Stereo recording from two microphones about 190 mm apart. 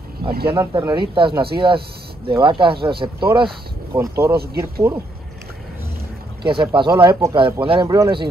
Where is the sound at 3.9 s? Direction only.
15° right (ahead or behind).